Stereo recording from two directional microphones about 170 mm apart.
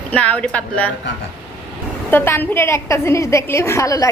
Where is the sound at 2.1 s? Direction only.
10° left (ahead or behind).